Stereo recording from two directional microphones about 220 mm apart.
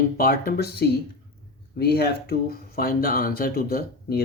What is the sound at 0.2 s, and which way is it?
Speech, 40° left (ahead or behind).